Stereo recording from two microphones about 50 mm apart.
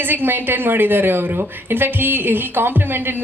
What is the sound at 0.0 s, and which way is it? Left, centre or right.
A woman's voice, right.